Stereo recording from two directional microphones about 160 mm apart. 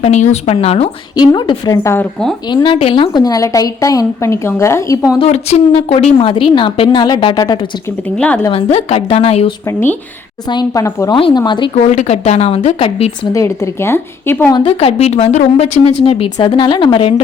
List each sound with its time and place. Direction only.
0.0 s speech: 45° left (ahead or behind)
1.1 s a woman's voice: 25° left (ahead or behind)
2.5 s a woman's voice: 30° left (ahead or behind)
5.3 s speech: 40° left (ahead or behind)
8.1 s speech: 5° left (ahead or behind)
8.4 s speech: 35° left (ahead or behind)
10.5 s a woman's voice: 25° left (ahead or behind)
11.2 s a woman's voice: 30° left (ahead or behind)
11.7 s speech: 45° left (ahead or behind)
13.3 s speech: 20° left (ahead or behind)
14.5 s speech: 35° left (ahead or behind)